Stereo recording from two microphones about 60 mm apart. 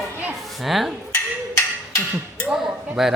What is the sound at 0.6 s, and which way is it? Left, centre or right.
Speech, centre.